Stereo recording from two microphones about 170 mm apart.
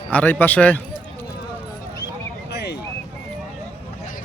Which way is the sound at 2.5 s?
75° left (ahead or behind).